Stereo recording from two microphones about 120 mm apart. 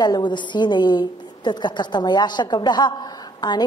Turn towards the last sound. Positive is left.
turn(degrees=35)  # may be behind; listen again after turning